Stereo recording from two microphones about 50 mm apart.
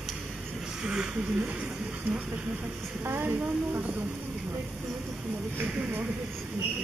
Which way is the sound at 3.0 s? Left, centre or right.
Right.